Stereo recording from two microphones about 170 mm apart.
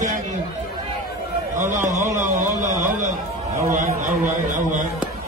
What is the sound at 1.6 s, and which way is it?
Speech, 50° right (ahead or behind).